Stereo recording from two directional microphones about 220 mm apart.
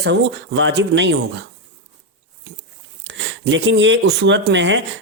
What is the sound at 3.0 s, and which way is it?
Speech, 55° right (ahead or behind).